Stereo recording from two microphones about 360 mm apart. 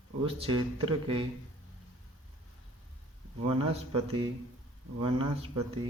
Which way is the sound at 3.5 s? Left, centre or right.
Centre.